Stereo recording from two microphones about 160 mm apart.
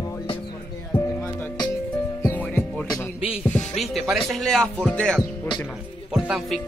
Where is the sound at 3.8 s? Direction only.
Centre (ahead or behind).